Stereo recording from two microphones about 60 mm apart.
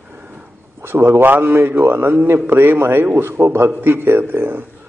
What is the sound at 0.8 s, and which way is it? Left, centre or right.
A man's voice, right.